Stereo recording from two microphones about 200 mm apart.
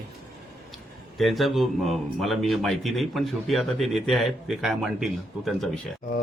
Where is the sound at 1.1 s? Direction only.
Centre (ahead or behind).